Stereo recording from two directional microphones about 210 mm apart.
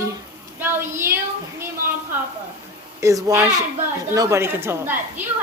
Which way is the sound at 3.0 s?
15° right (ahead or behind).